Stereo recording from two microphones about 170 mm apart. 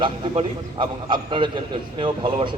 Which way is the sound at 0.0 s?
30° right (ahead or behind).